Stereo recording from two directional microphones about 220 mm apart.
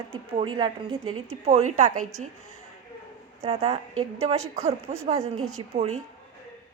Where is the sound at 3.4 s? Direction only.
25° right (ahead or behind).